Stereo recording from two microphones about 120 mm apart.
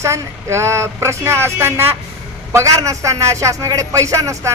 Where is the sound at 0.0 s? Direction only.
25° right (ahead or behind).